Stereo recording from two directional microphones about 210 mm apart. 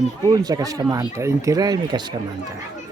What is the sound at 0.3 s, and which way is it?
Speech, 15° right (ahead or behind).